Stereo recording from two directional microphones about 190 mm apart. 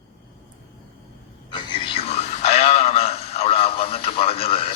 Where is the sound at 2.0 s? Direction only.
35° left (ahead or behind).